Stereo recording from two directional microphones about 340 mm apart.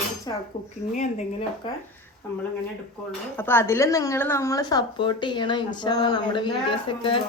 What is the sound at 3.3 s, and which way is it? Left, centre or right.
A woman's voice, centre.